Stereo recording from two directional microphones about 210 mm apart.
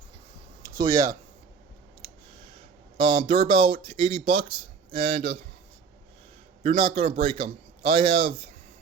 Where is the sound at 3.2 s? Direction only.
25° right (ahead or behind).